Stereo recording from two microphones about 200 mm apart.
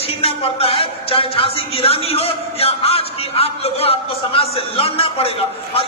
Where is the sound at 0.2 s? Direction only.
30° left (ahead or behind).